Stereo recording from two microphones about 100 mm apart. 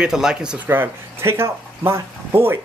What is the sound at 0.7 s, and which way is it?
Speech, 25° right (ahead or behind).